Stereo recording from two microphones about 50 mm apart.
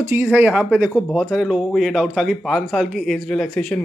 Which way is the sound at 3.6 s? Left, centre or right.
Centre.